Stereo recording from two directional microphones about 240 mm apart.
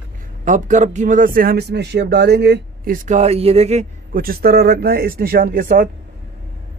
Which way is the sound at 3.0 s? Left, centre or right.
Right.